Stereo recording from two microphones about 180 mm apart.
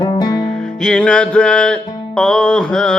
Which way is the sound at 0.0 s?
20° left (ahead or behind).